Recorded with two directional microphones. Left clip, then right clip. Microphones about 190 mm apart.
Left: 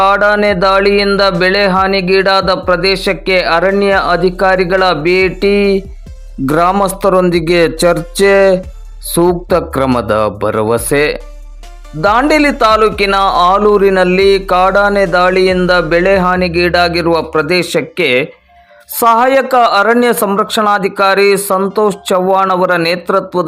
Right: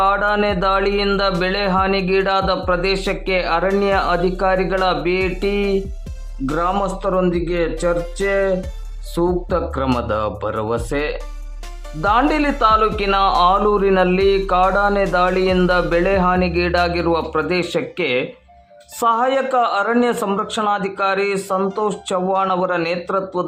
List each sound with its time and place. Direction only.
0.0 s speech: 25° left (ahead or behind)